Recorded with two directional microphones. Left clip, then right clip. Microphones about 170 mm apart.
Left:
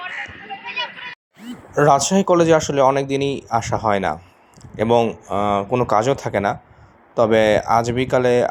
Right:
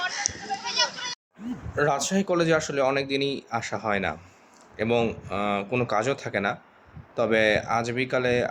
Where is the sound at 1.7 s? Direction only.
35° left (ahead or behind).